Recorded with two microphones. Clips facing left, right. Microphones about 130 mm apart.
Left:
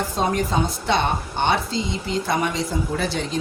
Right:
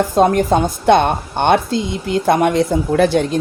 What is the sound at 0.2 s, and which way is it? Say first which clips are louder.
Speech: right 9 dB; 55° right (ahead or behind).